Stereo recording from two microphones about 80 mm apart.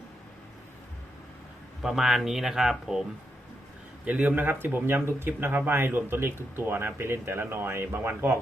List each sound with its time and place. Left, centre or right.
1.8 s speech: centre
4.0 s speech: centre